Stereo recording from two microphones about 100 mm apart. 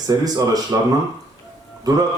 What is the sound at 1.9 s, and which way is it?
Speech, 40° right (ahead or behind).